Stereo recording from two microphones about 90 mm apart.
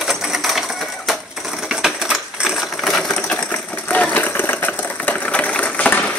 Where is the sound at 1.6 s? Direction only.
Centre (ahead or behind).